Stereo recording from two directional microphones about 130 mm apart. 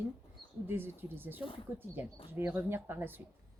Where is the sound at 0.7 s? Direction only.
15° right (ahead or behind).